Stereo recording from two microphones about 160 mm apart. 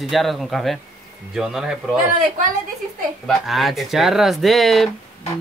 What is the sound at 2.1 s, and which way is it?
Speech, 50° right (ahead or behind).